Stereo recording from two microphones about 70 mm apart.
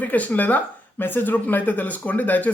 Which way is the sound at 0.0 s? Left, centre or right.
Left.